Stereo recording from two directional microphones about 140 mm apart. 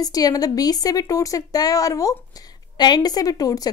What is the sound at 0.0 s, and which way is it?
A woman's voice, 25° left (ahead or behind).